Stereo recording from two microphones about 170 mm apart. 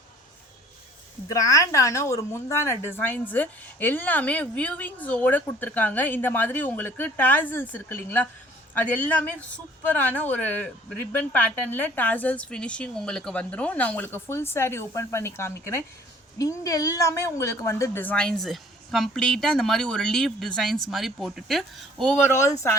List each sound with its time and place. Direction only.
1.3 s a woman's voice: 20° left (ahead or behind)